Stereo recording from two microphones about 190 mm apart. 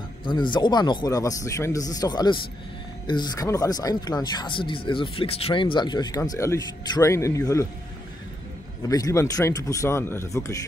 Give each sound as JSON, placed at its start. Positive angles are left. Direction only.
{"t": 0.2, "sound": "speech", "side_deg": 25}
{"t": 8.8, "sound": "speech", "side_deg": 15}